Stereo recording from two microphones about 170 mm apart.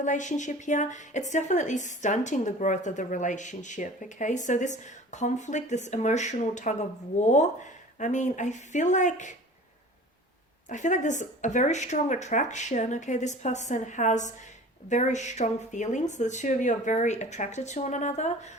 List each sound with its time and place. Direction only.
0.0 s a woman's voice: 45° left (ahead or behind)
10.7 s a woman's voice: 45° left (ahead or behind)